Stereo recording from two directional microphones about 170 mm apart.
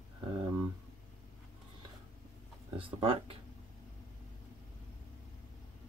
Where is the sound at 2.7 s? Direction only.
30° right (ahead or behind).